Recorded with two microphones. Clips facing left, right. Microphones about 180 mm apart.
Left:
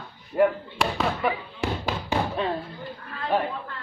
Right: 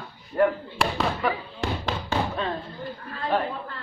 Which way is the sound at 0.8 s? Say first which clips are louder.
Even; centre (ahead or behind).